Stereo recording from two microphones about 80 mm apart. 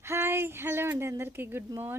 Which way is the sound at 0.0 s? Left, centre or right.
Right.